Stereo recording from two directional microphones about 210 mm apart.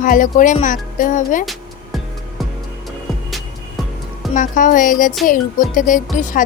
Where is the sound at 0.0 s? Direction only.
40° left (ahead or behind).